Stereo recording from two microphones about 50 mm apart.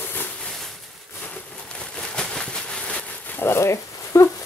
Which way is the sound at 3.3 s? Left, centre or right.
Left.